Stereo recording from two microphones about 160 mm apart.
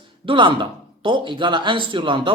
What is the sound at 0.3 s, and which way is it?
Speech, 30° right (ahead or behind).